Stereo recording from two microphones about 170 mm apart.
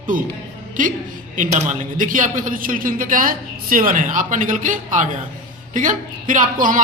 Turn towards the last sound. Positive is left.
turn(degrees=-50)  # may be behind; listen again after turning